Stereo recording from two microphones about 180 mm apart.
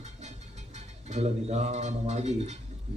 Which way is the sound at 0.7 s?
40° right (ahead or behind).